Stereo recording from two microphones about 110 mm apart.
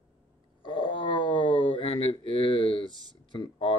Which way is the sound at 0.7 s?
50° left (ahead or behind).